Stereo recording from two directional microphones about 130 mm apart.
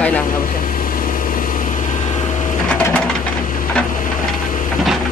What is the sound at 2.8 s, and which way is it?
Bird, 10° left (ahead or behind).